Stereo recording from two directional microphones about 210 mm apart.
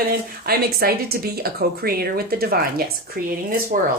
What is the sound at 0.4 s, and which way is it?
A woman's voice, 45° right (ahead or behind).